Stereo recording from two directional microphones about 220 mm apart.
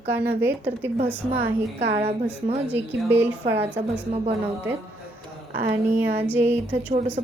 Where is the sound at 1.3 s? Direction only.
45° right (ahead or behind).